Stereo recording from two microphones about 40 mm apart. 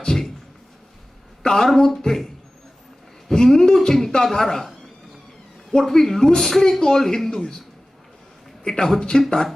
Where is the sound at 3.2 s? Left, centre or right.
Centre.